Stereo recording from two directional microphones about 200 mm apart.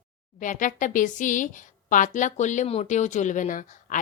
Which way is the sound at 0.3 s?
40° left (ahead or behind).